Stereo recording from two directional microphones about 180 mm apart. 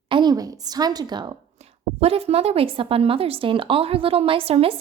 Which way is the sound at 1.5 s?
35° right (ahead or behind).